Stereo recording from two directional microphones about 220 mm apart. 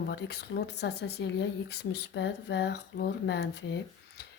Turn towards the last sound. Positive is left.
turn(degrees=50)  # may be behind; listen again after turning